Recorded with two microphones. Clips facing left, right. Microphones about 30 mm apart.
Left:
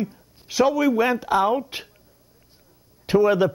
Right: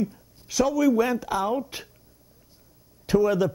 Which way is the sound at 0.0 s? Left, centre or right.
Left.